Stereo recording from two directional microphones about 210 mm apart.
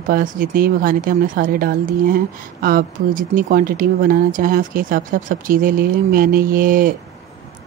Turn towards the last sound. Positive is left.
turn(degrees=-40)  # may be behind; listen again after turning